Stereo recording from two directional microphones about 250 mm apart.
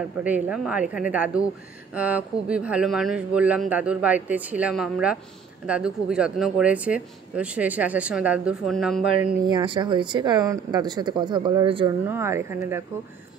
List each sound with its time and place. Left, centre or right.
0.2 s speech: centre
9.5 s speech: centre